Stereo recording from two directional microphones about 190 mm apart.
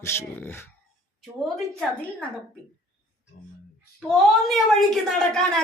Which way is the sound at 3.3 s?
55° left (ahead or behind).